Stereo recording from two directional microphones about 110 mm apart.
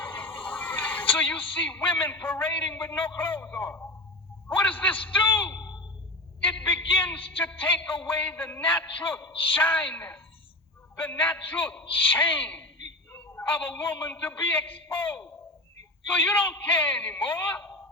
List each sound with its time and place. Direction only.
0.0 s speech: 15° left (ahead or behind)
5.5 s a sound: 35° left (ahead or behind)
6.4 s a man's voice: 10° left (ahead or behind)